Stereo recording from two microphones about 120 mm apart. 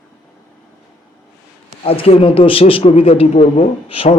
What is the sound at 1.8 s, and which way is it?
A man's voice, 50° left (ahead or behind).